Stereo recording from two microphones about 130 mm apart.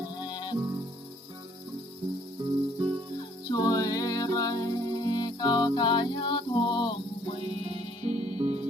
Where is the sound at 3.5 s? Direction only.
30° left (ahead or behind).